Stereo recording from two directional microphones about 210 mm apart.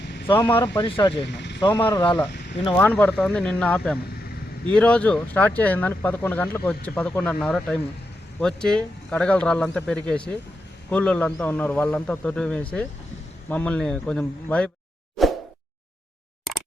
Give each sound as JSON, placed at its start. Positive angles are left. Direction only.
{"t": 0.8, "sound": "speech", "side_deg": 25}
{"t": 1.3, "sound": "vehicle", "side_deg": 55}
{"t": 1.6, "sound": "speech", "side_deg": 20}
{"t": 2.7, "sound": "speech", "side_deg": 5}